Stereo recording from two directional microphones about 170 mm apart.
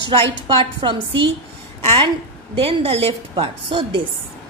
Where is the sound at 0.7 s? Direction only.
30° right (ahead or behind).